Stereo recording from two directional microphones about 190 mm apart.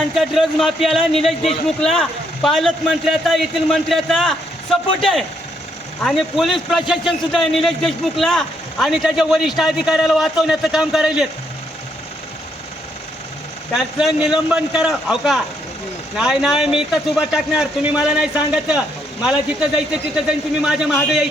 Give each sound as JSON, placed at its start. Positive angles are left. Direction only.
{"t": 0.1, "sound": "speech", "side_deg": 0}
{"t": 13.7, "sound": "speech", "side_deg": 0}